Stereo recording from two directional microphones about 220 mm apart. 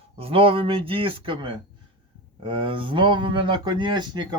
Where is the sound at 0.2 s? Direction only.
25° right (ahead or behind).